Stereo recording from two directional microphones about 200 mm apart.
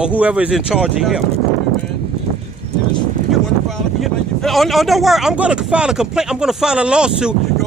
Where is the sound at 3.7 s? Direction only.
Centre (ahead or behind).